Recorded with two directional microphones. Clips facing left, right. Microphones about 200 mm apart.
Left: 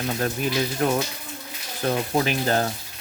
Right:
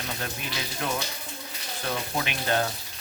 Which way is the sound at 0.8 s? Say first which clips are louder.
Left 5 dB; 45° left (ahead or behind).